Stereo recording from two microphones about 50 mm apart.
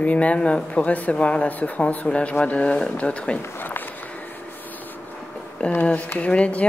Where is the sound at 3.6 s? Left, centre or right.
Left.